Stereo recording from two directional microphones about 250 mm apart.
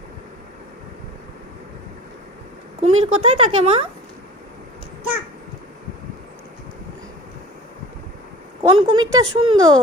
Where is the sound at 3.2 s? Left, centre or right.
Right.